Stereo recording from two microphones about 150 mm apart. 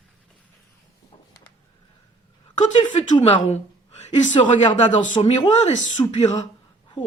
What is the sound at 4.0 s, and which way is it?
A woman's voice, 50° left (ahead or behind).